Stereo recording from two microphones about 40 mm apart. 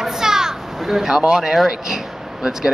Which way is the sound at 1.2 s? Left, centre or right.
Centre.